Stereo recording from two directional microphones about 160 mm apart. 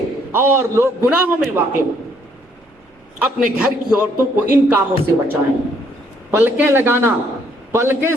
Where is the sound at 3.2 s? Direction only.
5° right (ahead or behind).